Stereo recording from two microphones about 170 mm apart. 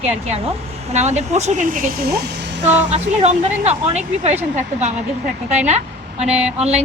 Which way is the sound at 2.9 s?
40° right (ahead or behind).